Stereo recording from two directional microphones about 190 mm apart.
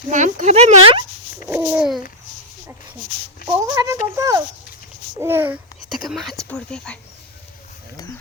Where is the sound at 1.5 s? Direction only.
10° right (ahead or behind).